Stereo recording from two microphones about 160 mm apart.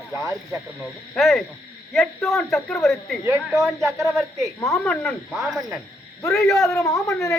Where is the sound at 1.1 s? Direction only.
Centre (ahead or behind).